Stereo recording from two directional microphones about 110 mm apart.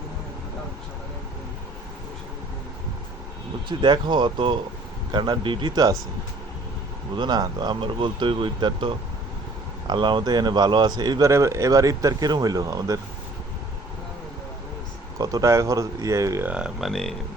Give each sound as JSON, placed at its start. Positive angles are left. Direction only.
{"t": 3.7, "sound": "speech", "side_deg": -45}
{"t": 7.2, "sound": "speech", "side_deg": -35}
{"t": 11.3, "sound": "speech", "side_deg": -25}
{"t": 15.2, "sound": "speech", "side_deg": -30}
{"t": 16.5, "sound": "speech", "side_deg": -10}